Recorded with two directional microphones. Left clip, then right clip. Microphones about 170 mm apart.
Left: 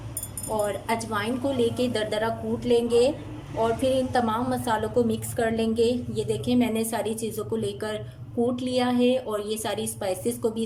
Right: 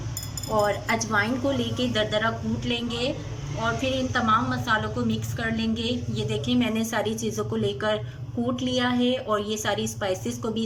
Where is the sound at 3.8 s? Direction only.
30° left (ahead or behind).